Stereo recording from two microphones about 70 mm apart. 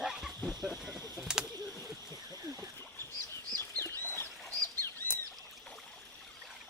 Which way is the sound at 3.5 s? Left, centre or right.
Left.